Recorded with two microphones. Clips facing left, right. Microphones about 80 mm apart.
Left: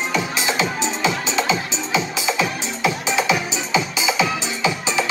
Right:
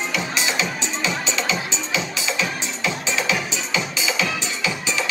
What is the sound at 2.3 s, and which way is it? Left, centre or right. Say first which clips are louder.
Music: left 5 dB; centre.